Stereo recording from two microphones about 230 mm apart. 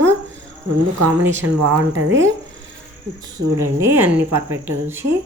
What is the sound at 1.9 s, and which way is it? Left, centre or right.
Speech, right.